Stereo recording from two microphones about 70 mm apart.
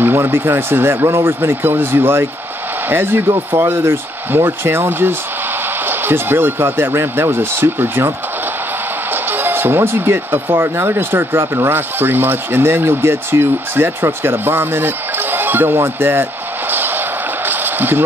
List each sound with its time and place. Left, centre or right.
0.0 s speech: right
9.1 s speech: right
17.5 s a sound: right